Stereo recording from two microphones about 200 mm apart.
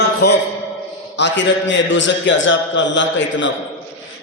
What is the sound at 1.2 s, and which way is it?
A man's voice, 65° left (ahead or behind).